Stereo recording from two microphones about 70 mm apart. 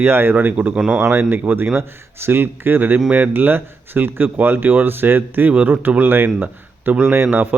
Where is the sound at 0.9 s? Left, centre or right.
Right.